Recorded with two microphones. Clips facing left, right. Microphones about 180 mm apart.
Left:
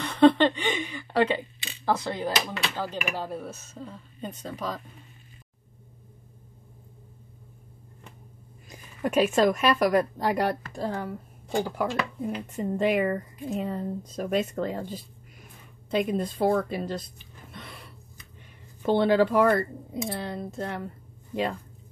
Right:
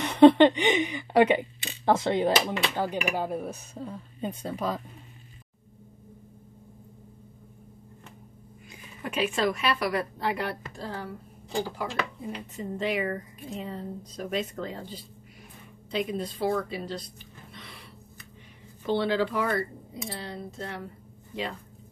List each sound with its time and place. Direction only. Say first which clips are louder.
0.0 s a woman's voice: right 3 dB; 20° right (ahead or behind)
8.6 s a woman's voice: left 8 dB; 40° left (ahead or behind)
17.6 s gasp: left 5 dB; 50° left (ahead or behind)
18.8 s a woman's voice: left 5 dB; 50° left (ahead or behind)